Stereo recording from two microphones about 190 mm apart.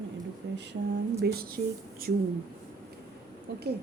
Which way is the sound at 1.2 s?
55° right (ahead or behind).